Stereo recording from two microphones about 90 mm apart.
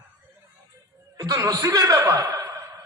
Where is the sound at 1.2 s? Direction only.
40° right (ahead or behind).